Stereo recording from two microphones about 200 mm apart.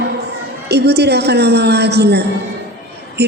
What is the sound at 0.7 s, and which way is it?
A woman's voice, 55° right (ahead or behind).